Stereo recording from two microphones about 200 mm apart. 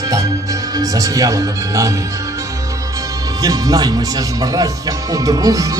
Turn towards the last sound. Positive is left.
turn(degrees=-15)  # may be behind; listen again after turning